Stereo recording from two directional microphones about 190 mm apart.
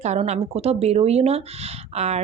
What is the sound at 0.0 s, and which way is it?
Speech, 35° right (ahead or behind).